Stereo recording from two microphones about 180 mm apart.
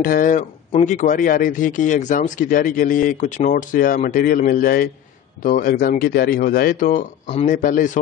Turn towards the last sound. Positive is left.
turn(degrees=45)  # may be behind; listen again after turning